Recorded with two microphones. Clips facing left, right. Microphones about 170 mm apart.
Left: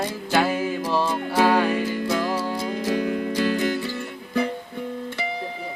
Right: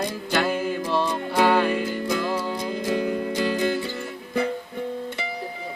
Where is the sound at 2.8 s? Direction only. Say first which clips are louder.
Even; 20° right (ahead or behind).